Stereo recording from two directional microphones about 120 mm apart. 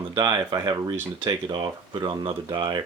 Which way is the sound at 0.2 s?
30° right (ahead or behind).